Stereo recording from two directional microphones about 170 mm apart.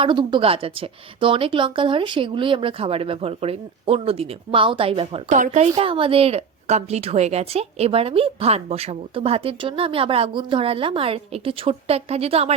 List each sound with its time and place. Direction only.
0.0 s a woman's voice: 30° right (ahead or behind)
5.3 s a woman's voice: 45° right (ahead or behind)